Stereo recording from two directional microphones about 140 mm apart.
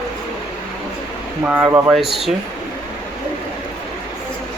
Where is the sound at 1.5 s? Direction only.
10° right (ahead or behind).